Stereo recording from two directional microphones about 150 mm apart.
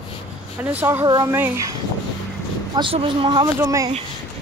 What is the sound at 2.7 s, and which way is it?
Speech, 35° right (ahead or behind).